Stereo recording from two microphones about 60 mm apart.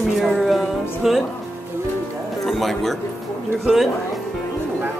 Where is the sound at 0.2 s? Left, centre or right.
Centre.